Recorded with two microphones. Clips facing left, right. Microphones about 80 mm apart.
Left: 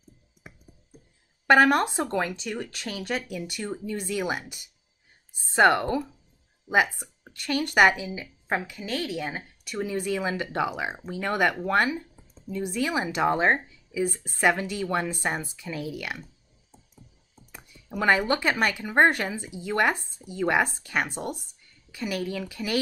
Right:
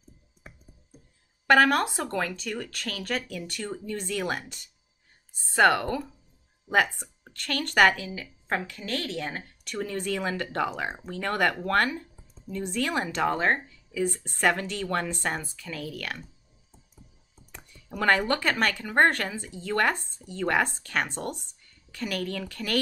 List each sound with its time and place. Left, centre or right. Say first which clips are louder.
1.6 s a woman's voice: left 2 dB; left
5.4 s a woman's voice: left 1 dB; left
6.7 s a woman's voice: left 1 dB; centre
13.9 s a woman's voice: left 1 dB; centre
17.5 s a woman's voice: left 2 dB; centre